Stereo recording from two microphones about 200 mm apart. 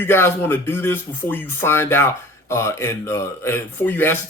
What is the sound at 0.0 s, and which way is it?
Speech, 10° left (ahead or behind).